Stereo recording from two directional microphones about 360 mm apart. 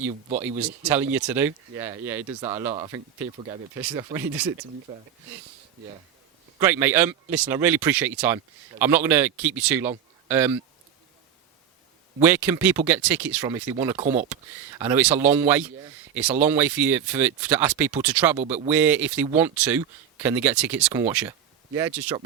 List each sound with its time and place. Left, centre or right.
0.6 s speech: centre
2.4 s speech: centre
6.6 s speech: centre
12.2 s speech: centre